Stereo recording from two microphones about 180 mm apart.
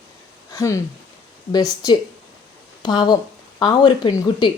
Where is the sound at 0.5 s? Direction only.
15° left (ahead or behind).